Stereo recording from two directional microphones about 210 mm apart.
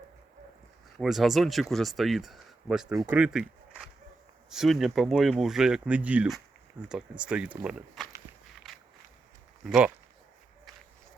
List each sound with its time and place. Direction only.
0.9 s speech: centre (ahead or behind)
9.6 s speech: 5° right (ahead or behind)